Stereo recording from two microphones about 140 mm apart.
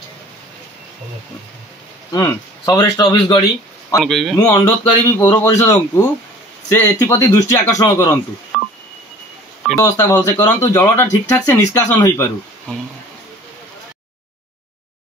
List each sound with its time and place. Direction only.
2.1 s a man's voice: 25° left (ahead or behind)
4.0 s speech: centre (ahead or behind)
4.4 s a man's voice: 20° left (ahead or behind)
8.5 s telephone dialing: centre (ahead or behind)
9.8 s a man's voice: 20° left (ahead or behind)